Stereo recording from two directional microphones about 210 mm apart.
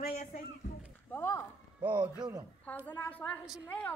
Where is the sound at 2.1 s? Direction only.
10° right (ahead or behind).